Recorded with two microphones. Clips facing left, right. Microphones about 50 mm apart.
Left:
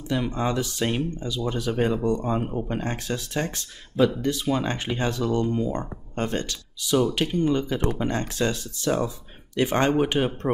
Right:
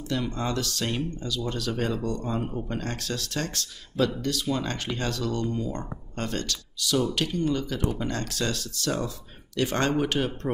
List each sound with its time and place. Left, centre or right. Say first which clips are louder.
0.1 s speech: left 4 dB; centre